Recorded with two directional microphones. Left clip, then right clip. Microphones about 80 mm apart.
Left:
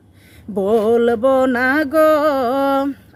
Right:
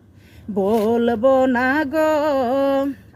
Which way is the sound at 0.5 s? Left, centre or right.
Left.